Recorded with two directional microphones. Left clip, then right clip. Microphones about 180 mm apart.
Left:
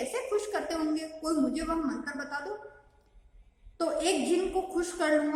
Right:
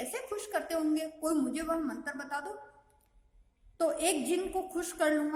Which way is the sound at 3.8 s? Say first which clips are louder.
Left 2 dB; 45° right (ahead or behind).